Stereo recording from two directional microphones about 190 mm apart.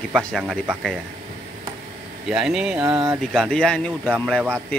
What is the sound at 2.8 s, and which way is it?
Speech, 15° right (ahead or behind).